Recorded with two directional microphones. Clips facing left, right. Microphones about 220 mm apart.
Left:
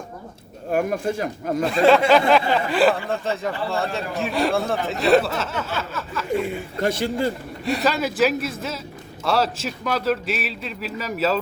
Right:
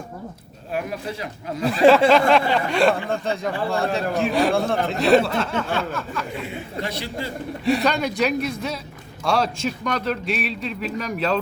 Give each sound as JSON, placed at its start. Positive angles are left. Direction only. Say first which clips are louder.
{"t": 0.7, "sound": "speech", "louder": "left 6 dB", "side_deg": 50}
{"t": 2.0, "sound": "speech", "louder": "even", "side_deg": 0}
{"t": 6.8, "sound": "speech", "louder": "left 11 dB", "side_deg": 50}
{"t": 7.6, "sound": "speech", "louder": "right 1 dB", "side_deg": 0}